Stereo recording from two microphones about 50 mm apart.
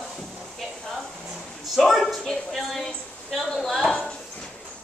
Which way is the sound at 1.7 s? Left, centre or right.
Centre.